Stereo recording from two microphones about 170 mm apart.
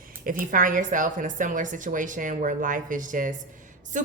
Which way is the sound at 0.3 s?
55° right (ahead or behind).